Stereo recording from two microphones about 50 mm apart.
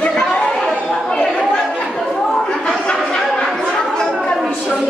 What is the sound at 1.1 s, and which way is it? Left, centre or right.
Chatter, centre.